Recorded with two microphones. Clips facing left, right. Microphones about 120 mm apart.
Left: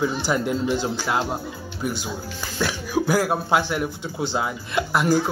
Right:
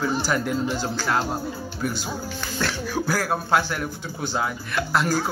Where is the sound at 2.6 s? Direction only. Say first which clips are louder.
Left 3 dB; 15° left (ahead or behind).